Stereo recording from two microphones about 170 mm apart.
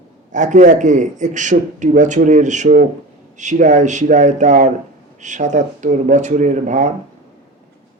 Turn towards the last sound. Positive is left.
turn(degrees=-45)  # may be behind; listen again after turning